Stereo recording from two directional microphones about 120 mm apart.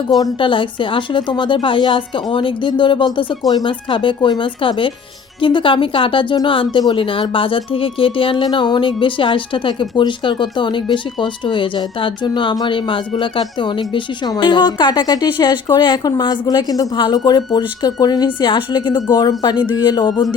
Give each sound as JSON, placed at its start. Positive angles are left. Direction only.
{"t": 0.2, "sound": "speech", "side_deg": 40}